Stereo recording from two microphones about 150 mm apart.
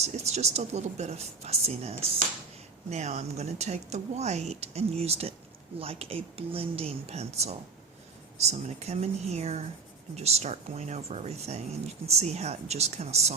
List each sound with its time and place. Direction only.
0.0 s speech: 45° right (ahead or behind)